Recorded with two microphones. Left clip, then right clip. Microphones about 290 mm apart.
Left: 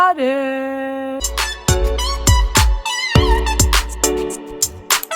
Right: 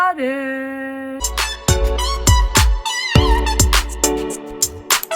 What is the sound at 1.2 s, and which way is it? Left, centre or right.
Music, centre.